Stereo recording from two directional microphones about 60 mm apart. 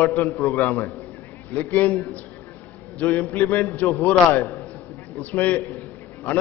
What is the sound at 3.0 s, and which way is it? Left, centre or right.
A man's voice, left.